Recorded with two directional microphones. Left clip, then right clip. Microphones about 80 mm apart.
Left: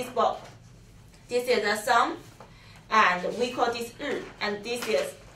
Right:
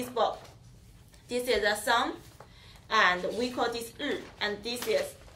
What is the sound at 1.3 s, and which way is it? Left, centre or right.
Speech, left.